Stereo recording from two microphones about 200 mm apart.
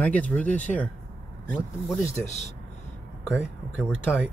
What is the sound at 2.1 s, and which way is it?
Speech, 35° left (ahead or behind).